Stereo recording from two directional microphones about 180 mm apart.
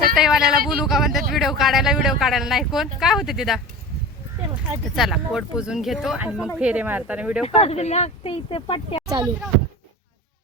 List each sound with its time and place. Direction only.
0.1 s speech: 5° right (ahead or behind)
4.9 s speech: centre (ahead or behind)
7.4 s speech: 35° left (ahead or behind)